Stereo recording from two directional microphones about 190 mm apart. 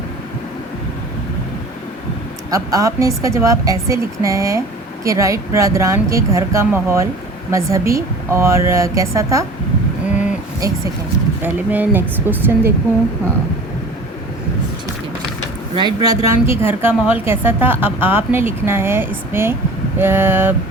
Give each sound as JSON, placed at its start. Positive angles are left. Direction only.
{"t": 2.5, "sound": "a woman's voice", "side_deg": -20}
{"t": 11.4, "sound": "a woman's voice", "side_deg": -10}
{"t": 15.7, "sound": "a woman's voice", "side_deg": -25}